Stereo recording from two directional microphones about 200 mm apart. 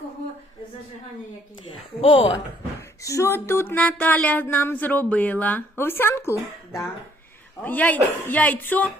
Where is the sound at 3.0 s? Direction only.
15° left (ahead or behind).